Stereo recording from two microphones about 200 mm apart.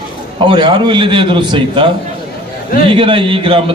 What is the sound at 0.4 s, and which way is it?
A man's voice, 20° right (ahead or behind).